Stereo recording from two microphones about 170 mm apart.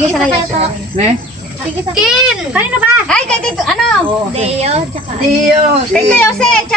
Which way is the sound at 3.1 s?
5° left (ahead or behind).